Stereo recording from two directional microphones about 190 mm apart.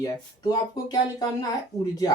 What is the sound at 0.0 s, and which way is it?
Speech, 20° left (ahead or behind).